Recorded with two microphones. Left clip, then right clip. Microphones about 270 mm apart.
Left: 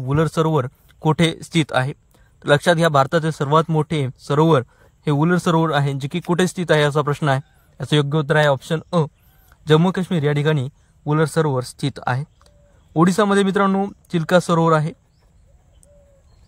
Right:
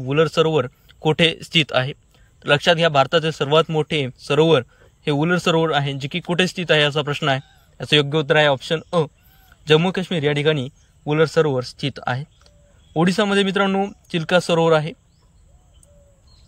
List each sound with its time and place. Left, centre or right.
0.0 s a man's voice: left